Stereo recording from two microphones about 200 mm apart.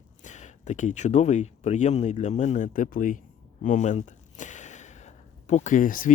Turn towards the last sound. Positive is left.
turn(degrees=40)  # may be behind; listen again after turning